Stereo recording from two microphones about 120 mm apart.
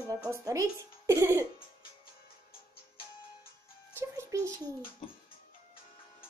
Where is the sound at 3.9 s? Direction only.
25° right (ahead or behind).